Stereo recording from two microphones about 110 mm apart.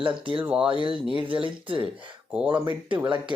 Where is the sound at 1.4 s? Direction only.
50° right (ahead or behind).